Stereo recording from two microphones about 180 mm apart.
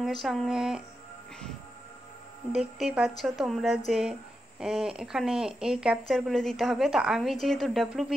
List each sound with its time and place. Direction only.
0.0 s a woman's voice: centre (ahead or behind)
2.5 s a woman's voice: 5° right (ahead or behind)